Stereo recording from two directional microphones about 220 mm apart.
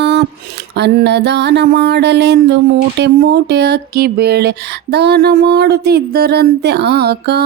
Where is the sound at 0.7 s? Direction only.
50° right (ahead or behind).